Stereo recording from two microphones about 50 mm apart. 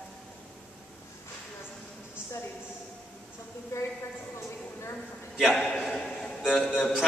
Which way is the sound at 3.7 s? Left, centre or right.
Left.